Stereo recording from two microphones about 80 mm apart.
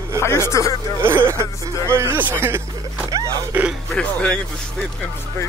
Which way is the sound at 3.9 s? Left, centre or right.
Centre.